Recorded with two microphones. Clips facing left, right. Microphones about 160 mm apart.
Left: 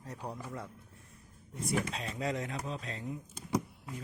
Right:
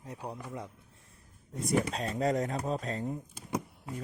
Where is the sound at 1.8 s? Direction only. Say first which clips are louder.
Right 6 dB; 40° right (ahead or behind).